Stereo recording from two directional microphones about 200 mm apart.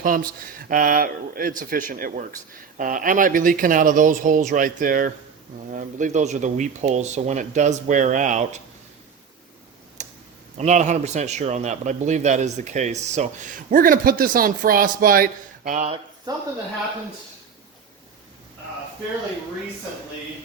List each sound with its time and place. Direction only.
0.0 s a man's voice: 45° right (ahead or behind)
10.0 s computer keyboard: 35° right (ahead or behind)
10.6 s a man's voice: 35° right (ahead or behind)
16.3 s speech: 20° right (ahead or behind)